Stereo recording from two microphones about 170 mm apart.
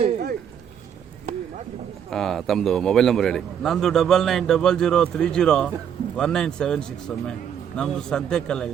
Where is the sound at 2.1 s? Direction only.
Centre (ahead or behind).